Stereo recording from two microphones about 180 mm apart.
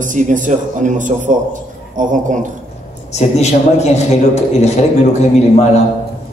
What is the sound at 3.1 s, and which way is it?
A man's voice, 40° left (ahead or behind).